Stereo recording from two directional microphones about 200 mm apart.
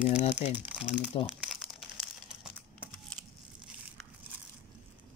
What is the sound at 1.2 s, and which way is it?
Crumpling, centre (ahead or behind).